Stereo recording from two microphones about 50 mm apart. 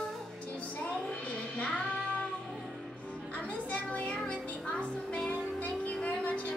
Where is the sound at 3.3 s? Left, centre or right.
Left.